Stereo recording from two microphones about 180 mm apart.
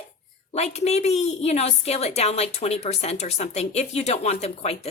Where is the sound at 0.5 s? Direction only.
35° left (ahead or behind).